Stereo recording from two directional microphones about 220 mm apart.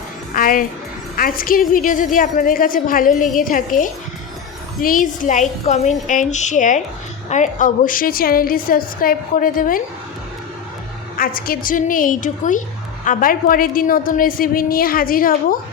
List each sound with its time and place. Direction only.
0.3 s music: 40° left (ahead or behind)
1.1 s a woman's voice: 40° left (ahead or behind)
11.2 s a woman's voice: 40° left (ahead or behind)